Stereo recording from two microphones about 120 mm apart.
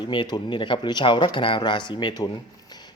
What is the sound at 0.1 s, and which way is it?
Speech, 40° left (ahead or behind).